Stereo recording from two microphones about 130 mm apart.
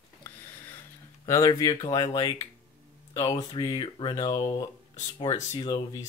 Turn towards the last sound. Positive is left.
turn(degrees=25)  # may be behind; listen again after turning